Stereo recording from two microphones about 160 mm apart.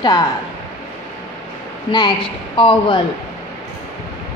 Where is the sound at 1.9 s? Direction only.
30° left (ahead or behind).